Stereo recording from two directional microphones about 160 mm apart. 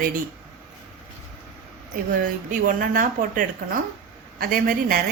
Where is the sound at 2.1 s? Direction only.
55° right (ahead or behind).